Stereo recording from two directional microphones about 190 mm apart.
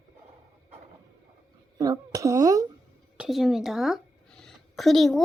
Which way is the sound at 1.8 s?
20° right (ahead or behind).